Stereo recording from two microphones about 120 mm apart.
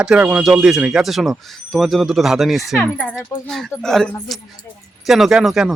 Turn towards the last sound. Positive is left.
turn(degrees=0)  # may be behind; listen again after turning